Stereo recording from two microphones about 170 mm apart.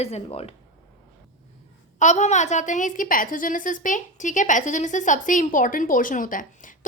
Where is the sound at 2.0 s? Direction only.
45° left (ahead or behind).